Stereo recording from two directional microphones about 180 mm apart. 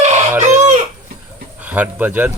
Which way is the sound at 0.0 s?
40° right (ahead or behind).